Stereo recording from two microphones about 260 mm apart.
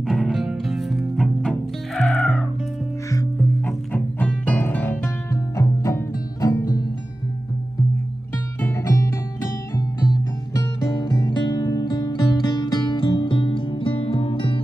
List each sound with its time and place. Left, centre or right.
0.0 s music: centre
8.6 s music: centre